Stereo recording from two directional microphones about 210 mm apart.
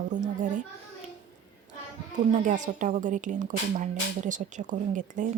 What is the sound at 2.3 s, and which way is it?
Speech, 35° right (ahead or behind).